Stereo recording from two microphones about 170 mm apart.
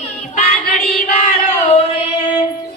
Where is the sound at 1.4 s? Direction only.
35° left (ahead or behind).